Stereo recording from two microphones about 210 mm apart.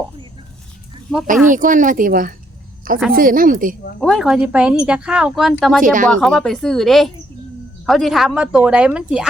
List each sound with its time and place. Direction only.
1.1 s a woman's voice: centre (ahead or behind)
1.5 s a woman's voice: 40° right (ahead or behind)
4.0 s a woman's voice: centre (ahead or behind)
5.8 s a woman's voice: 40° right (ahead or behind)
6.1 s a woman's voice: 5° left (ahead or behind)